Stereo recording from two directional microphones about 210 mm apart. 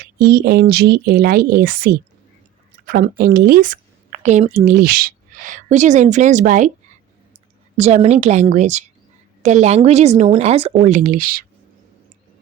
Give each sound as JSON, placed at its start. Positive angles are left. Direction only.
{"t": 0.2, "sound": "a woman's voice", "side_deg": -50}
{"t": 7.8, "sound": "speech", "side_deg": -30}